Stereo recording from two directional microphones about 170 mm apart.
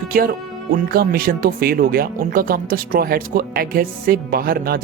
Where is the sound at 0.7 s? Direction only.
60° right (ahead or behind).